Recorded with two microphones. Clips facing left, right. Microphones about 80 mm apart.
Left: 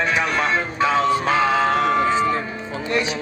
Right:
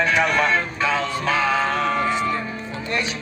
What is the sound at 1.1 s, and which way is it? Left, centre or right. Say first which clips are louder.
Speech: left 3 dB; left.